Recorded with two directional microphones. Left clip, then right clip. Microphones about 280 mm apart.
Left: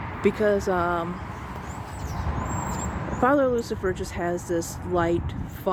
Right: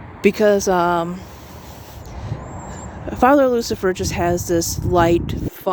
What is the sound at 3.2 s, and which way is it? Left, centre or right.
Speech, right.